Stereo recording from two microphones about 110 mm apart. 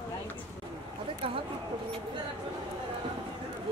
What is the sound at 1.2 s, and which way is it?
Speech, 55° right (ahead or behind).